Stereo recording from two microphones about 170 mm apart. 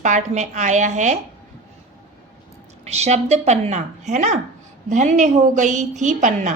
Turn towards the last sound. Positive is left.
turn(degrees=-45)  # may be behind; listen again after turning